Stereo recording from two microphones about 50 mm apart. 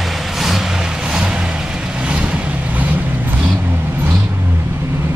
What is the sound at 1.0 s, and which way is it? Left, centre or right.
Vehicle, centre.